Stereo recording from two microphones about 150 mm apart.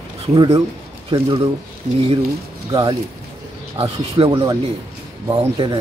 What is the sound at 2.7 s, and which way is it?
Speech, 25° right (ahead or behind).